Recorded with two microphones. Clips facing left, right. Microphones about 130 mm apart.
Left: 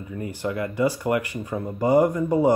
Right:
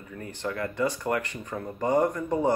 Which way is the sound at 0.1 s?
10° left (ahead or behind).